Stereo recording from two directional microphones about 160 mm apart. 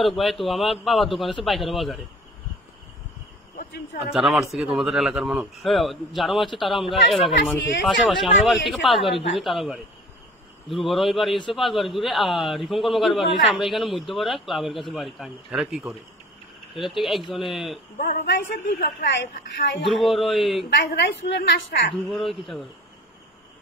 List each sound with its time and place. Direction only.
0.0 s speech: centre (ahead or behind)
4.0 s speech: centre (ahead or behind)
17.9 s a woman's voice: 60° left (ahead or behind); by 19.9 s 90° left
19.9 s speech: centre (ahead or behind)
20.9 s a woman's voice: 90° left
22.0 s speech: centre (ahead or behind)